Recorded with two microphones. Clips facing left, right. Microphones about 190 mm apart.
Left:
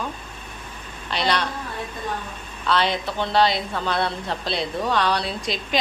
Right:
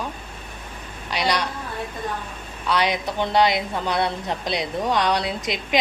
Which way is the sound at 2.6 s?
15° right (ahead or behind).